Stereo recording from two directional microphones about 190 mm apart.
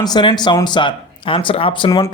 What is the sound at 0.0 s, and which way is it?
Speech, 25° left (ahead or behind).